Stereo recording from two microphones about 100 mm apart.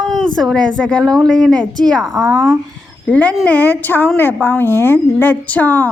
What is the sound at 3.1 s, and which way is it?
A woman's voice, 15° left (ahead or behind).